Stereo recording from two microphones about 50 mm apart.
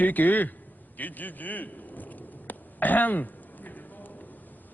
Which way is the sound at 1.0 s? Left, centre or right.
Left.